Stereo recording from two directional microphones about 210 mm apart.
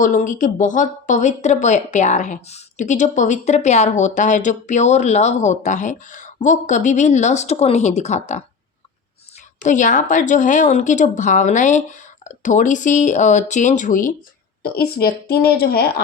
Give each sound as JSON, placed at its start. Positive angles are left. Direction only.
{"t": 0.0, "sound": "speech", "side_deg": 40}
{"t": 9.6, "sound": "a woman's voice", "side_deg": 35}